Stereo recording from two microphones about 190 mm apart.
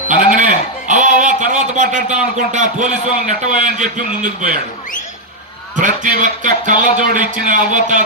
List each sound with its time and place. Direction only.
0.1 s a man's voice: 45° right (ahead or behind)
5.8 s a man's voice: 45° right (ahead or behind)